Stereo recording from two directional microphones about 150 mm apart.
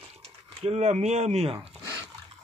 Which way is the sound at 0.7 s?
45° right (ahead or behind).